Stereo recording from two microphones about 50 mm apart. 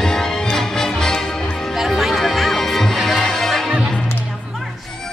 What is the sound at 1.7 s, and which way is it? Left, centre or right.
Music, centre.